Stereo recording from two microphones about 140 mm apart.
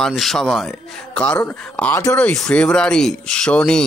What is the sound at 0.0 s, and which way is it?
A man's voice, centre (ahead or behind).